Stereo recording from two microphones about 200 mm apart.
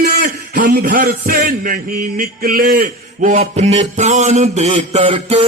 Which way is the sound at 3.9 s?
35° right (ahead or behind).